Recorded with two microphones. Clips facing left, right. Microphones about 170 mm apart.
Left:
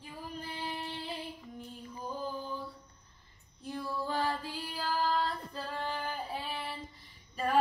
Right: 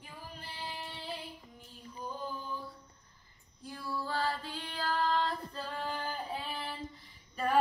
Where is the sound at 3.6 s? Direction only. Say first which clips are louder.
Left 3 dB; 20° left (ahead or behind).